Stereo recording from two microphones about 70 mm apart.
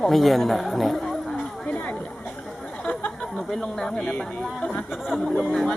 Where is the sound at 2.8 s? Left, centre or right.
Centre.